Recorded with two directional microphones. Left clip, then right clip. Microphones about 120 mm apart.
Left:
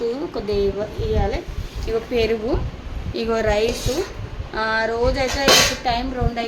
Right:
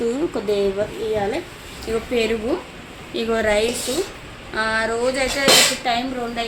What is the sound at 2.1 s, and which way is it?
Speech, 15° right (ahead or behind).